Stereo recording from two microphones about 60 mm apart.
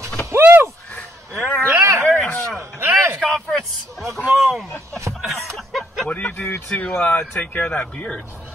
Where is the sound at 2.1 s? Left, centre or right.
Centre.